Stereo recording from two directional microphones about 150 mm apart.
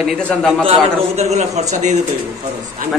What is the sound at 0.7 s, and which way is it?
A man's voice, 45° right (ahead or behind).